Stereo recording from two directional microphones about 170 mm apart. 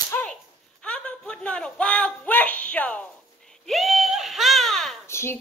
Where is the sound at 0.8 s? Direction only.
5° left (ahead or behind).